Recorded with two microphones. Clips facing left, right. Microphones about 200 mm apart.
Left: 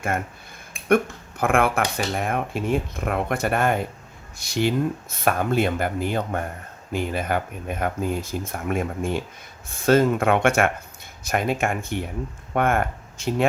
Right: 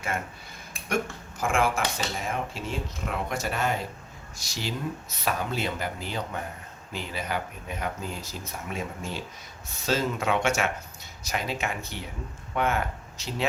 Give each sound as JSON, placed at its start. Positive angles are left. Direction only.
{"t": 0.9, "sound": "speech", "side_deg": 60}